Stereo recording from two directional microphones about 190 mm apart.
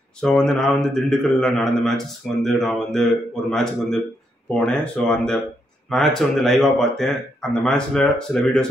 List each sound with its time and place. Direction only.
0.2 s a man's voice: 5° left (ahead or behind)